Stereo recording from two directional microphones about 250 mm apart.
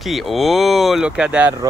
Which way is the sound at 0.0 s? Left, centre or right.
Centre.